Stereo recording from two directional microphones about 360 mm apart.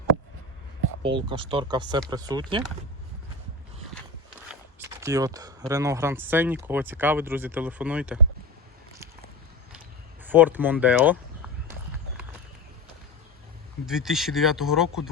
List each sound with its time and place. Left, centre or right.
1.0 s speech: centre
4.8 s speech: centre
10.2 s speech: centre
13.8 s speech: centre